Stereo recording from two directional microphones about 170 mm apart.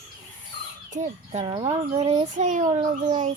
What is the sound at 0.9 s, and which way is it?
A child's voice, 45° right (ahead or behind).